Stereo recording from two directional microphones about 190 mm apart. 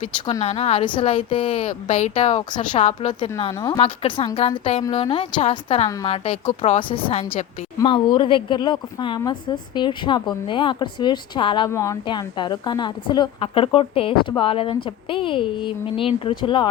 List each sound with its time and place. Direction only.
0.4 s a woman's voice: 30° left (ahead or behind)
7.8 s a woman's voice: 25° left (ahead or behind)
11.7 s a woman's voice: 15° left (ahead or behind)